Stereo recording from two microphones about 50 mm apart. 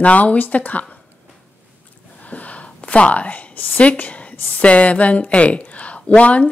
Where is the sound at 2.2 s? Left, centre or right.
Left.